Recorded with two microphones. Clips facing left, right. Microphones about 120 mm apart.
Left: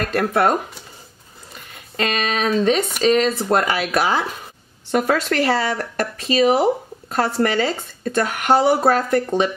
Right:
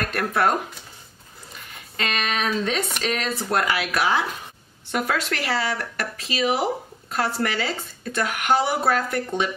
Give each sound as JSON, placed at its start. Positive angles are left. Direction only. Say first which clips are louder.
{"t": 0.0, "sound": "speech", "louder": "left 4 dB", "side_deg": 35}
{"t": 2.0, "sound": "speech", "louder": "left 5 dB", "side_deg": 35}